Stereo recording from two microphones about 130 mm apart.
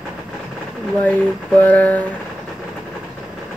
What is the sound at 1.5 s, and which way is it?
Speech, 10° left (ahead or behind).